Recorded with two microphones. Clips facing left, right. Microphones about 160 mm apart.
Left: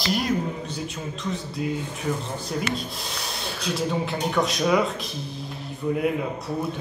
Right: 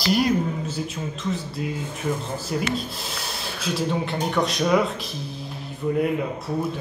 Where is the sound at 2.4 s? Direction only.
Centre (ahead or behind).